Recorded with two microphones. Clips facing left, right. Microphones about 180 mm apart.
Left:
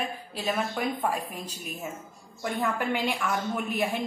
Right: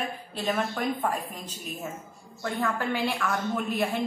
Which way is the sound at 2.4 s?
15° left (ahead or behind).